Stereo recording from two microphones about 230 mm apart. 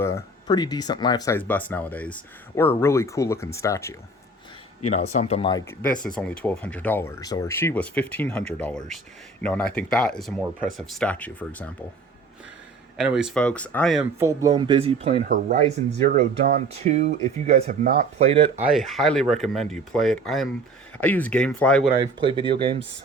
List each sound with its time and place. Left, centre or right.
0.0 s speech: centre
4.9 s speech: left
5.8 s speech: centre
13.0 s speech: centre
14.2 s speech: centre
18.6 s speech: centre
22.2 s speech: right